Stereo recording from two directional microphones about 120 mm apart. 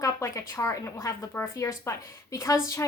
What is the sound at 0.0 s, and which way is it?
A woman's voice, 25° left (ahead or behind).